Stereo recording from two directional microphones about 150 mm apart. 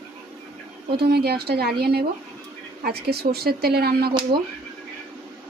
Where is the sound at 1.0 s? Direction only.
90° right.